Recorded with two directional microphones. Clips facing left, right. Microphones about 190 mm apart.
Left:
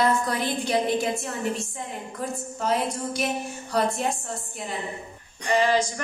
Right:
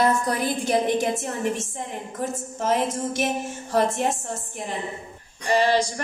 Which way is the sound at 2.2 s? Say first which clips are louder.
Right 2 dB; 45° right (ahead or behind).